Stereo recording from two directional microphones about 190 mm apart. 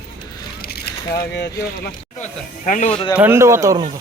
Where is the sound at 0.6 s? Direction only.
55° left (ahead or behind).